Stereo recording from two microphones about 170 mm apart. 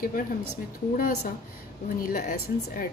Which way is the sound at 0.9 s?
60° left (ahead or behind).